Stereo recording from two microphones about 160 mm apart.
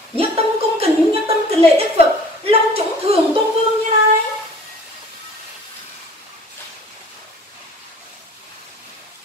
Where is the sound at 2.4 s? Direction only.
40° right (ahead or behind).